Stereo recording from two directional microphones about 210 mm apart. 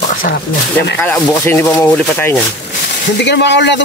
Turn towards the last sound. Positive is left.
turn(degrees=55)  # may be behind; listen again after turning